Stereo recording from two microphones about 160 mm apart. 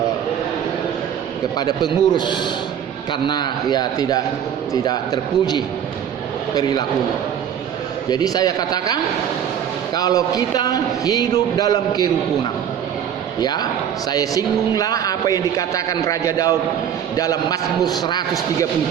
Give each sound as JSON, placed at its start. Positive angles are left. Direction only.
{"t": 1.5, "sound": "a man's voice", "side_deg": 25}
{"t": 8.1, "sound": "a man's voice", "side_deg": 25}
{"t": 13.4, "sound": "a man's voice", "side_deg": 25}